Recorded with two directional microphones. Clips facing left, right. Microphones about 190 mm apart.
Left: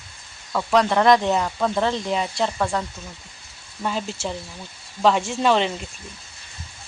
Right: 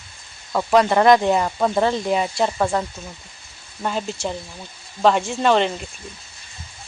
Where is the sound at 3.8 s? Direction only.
Centre (ahead or behind).